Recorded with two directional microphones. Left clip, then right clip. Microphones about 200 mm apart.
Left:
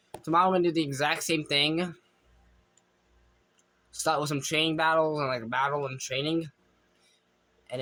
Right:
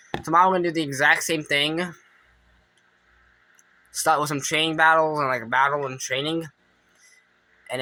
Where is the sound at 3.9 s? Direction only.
15° left (ahead or behind).